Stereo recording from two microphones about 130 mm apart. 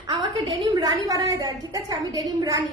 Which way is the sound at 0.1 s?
35° right (ahead or behind).